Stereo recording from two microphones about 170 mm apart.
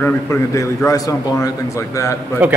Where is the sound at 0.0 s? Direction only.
15° left (ahead or behind).